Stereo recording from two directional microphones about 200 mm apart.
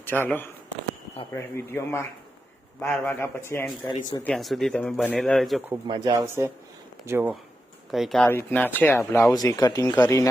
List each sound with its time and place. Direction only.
0.0 s speech: 10° left (ahead or behind)
4.2 s speech: centre (ahead or behind)
5.7 s speech: 20° right (ahead or behind); by 10.2 s 10° left (ahead or behind)